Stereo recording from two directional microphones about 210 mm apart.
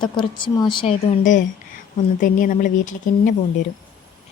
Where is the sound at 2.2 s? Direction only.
40° left (ahead or behind).